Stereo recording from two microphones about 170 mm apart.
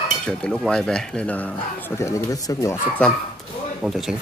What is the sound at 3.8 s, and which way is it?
Speech, centre (ahead or behind).